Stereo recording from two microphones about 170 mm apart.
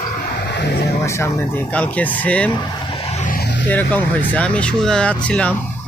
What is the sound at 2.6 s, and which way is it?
Vehicle, 25° left (ahead or behind).